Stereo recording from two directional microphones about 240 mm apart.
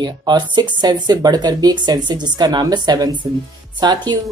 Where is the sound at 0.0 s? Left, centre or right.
Centre.